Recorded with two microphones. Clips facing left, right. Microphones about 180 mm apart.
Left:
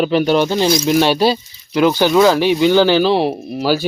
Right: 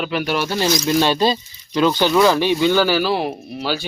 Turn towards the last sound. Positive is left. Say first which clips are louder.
# left 7 dB
turn(degrees=40)  # may be behind; listen again after turning